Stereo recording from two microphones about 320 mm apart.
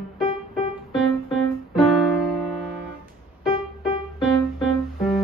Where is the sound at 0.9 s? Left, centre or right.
Centre.